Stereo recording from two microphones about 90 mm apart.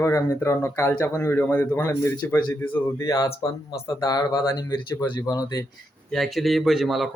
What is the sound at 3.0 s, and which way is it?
Speech, 40° left (ahead or behind).